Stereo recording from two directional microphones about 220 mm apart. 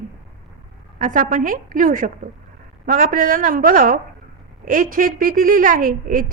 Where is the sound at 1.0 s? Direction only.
35° right (ahead or behind).